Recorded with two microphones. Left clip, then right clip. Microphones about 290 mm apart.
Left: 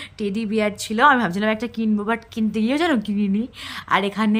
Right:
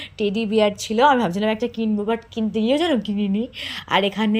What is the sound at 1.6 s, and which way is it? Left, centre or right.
Speech, left.